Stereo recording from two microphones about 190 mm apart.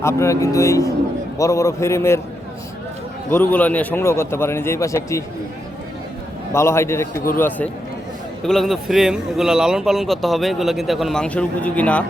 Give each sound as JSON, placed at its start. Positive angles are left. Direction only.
{"t": 0.0, "sound": "a man's voice", "side_deg": 15}
{"t": 3.2, "sound": "a man's voice", "side_deg": 10}
{"t": 6.5, "sound": "a man's voice", "side_deg": 15}